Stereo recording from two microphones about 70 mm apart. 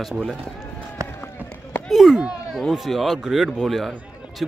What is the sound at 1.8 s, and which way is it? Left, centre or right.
Speech, centre.